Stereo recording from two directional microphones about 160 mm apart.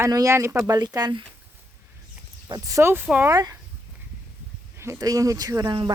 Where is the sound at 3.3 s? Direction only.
20° right (ahead or behind).